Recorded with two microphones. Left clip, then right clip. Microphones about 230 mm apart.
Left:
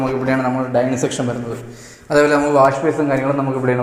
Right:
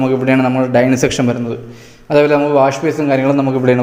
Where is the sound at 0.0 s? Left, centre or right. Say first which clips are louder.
Right 5 dB; right.